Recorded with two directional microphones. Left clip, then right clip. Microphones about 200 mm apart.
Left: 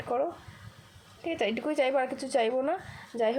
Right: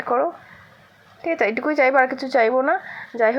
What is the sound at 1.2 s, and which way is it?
Speech, 50° right (ahead or behind).